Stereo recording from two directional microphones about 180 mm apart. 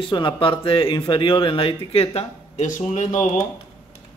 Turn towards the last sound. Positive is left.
turn(degrees=40)  # may be behind; listen again after turning